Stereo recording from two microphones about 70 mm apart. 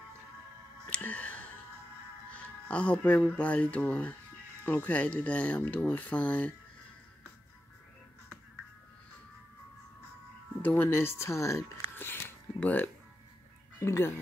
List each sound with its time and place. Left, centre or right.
0.8 s music: centre
2.3 s speech: centre
10.6 s speech: left
12.0 s music: left
13.7 s speech: left